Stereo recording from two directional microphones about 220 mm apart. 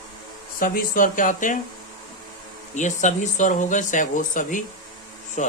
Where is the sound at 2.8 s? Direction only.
35° left (ahead or behind).